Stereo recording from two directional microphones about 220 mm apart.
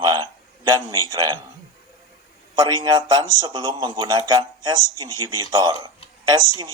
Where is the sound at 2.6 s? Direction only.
20° right (ahead or behind).